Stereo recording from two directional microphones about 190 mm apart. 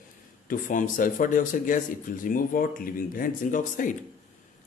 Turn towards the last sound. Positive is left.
turn(degrees=45)  # may be behind; listen again after turning